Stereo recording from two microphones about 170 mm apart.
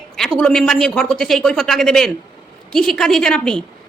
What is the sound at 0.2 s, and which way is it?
A woman's voice, 5° left (ahead or behind).